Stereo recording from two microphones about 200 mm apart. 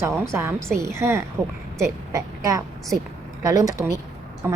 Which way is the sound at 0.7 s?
15° right (ahead or behind).